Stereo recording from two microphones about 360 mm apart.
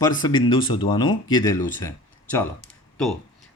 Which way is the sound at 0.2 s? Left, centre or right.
Centre.